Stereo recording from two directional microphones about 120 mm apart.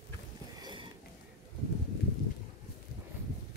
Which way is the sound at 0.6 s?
35° right (ahead or behind).